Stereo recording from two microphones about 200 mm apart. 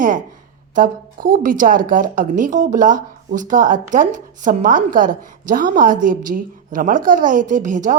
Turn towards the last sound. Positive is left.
turn(degrees=-40)  # may be behind; listen again after turning